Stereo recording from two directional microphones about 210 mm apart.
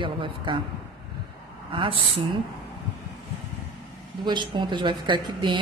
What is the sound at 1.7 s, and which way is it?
Speech, 25° right (ahead or behind).